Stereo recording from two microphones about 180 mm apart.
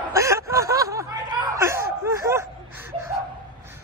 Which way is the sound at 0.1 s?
15° right (ahead or behind).